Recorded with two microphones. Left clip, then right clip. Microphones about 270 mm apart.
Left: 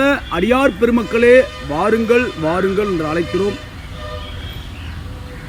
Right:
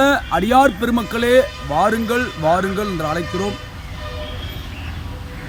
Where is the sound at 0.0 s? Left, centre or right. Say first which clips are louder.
Even; centre.